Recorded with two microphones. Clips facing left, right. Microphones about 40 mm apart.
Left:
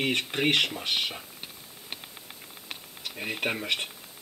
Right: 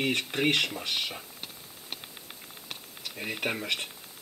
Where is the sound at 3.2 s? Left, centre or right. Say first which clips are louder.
Left 2 dB; centre.